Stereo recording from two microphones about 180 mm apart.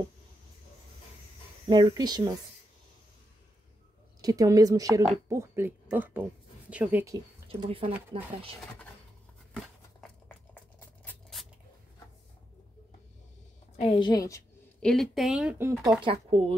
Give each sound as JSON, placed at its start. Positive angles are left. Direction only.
{"t": 1.7, "sound": "a woman's voice", "side_deg": -25}
{"t": 4.2, "sound": "a woman's voice", "side_deg": -20}
{"t": 7.4, "sound": "speech", "side_deg": -30}
{"t": 9.9, "sound": "a sound", "side_deg": 5}
{"t": 13.7, "sound": "a woman's voice", "side_deg": 30}
{"t": 14.8, "sound": "speech", "side_deg": 5}
{"t": 16.0, "sound": "speech", "side_deg": -30}